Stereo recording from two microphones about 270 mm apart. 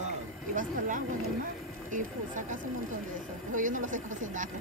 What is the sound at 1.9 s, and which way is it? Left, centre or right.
Speech, right.